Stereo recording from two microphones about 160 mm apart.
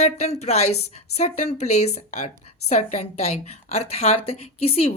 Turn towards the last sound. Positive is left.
turn(degrees=35)  # may be behind; listen again after turning